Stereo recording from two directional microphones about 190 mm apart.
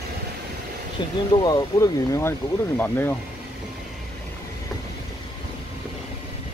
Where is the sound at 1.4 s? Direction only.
20° left (ahead or behind).